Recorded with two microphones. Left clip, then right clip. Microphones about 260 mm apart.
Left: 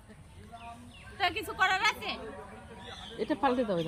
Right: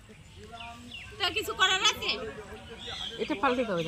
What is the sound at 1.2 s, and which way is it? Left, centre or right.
Speech, centre.